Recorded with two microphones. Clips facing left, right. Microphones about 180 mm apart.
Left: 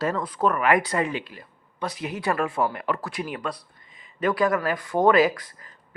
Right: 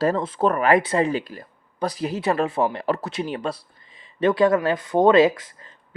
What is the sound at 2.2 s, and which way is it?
Speech, 25° right (ahead or behind).